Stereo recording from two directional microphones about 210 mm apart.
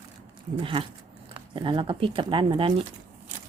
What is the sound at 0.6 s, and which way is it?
Speech, 25° right (ahead or behind).